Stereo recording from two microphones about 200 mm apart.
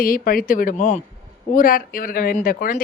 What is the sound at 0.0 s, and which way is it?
Speech, 45° left (ahead or behind).